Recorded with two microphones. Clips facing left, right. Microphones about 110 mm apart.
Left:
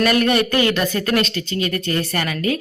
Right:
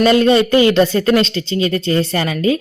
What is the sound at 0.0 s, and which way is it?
Speech, 25° right (ahead or behind).